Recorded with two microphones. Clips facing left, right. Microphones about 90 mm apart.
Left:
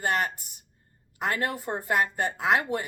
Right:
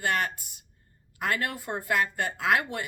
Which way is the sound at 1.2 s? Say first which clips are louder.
Left 1 dB; 35° left (ahead or behind).